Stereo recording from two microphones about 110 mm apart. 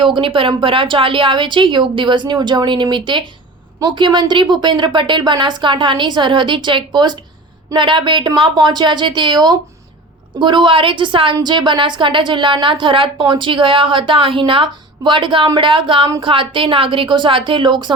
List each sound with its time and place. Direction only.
0.0 s a woman's voice: 50° right (ahead or behind)